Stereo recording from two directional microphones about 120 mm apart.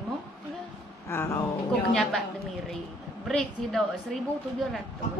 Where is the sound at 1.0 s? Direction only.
20° left (ahead or behind).